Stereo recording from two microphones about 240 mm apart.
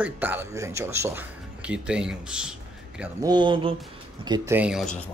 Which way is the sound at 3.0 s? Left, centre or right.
Centre.